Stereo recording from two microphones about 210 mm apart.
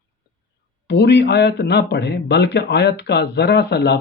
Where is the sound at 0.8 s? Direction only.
55° left (ahead or behind).